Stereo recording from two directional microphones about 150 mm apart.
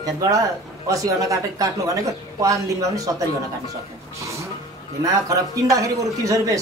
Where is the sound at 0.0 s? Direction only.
25° right (ahead or behind).